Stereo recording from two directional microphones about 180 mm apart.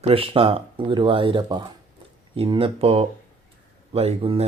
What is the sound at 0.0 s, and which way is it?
Speech, 30° right (ahead or behind).